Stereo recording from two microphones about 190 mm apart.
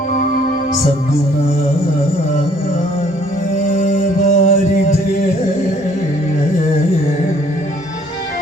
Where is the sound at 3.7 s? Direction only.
45° left (ahead or behind).